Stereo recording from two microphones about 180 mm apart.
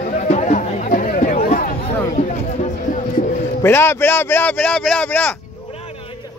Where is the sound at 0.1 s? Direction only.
45° left (ahead or behind).